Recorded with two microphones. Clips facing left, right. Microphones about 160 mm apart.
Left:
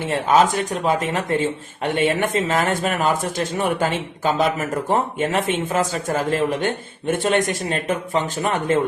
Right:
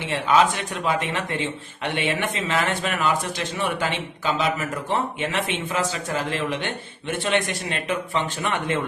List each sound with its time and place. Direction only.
0.0 s speech: 45° left (ahead or behind)